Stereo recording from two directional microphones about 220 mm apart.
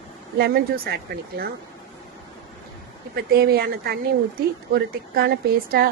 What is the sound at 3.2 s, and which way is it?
A woman's voice, 45° right (ahead or behind).